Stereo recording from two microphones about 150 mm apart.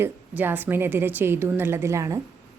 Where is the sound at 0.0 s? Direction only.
10° right (ahead or behind).